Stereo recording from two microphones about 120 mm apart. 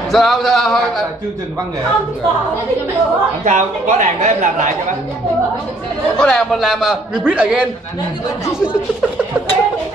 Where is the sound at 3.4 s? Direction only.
85° right.